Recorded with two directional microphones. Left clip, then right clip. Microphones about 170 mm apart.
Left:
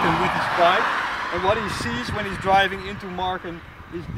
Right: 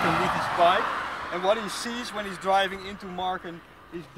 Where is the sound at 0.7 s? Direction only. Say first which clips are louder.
Left 5 dB; 45° left (ahead or behind).